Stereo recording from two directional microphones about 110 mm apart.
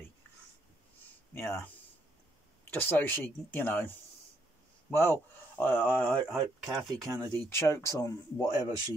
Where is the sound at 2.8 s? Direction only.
20° left (ahead or behind).